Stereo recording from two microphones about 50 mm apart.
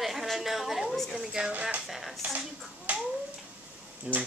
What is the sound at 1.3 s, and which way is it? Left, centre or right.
Speech, centre.